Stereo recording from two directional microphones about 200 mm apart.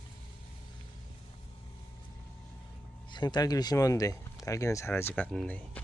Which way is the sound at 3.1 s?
20° left (ahead or behind).